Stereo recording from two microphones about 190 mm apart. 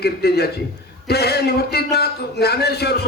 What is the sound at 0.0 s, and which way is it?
A man's voice, 55° left (ahead or behind).